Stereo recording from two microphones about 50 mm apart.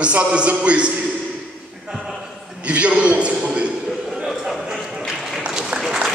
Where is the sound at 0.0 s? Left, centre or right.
Right.